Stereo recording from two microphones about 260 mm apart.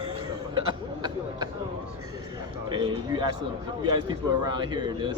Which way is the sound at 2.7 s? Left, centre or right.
Centre.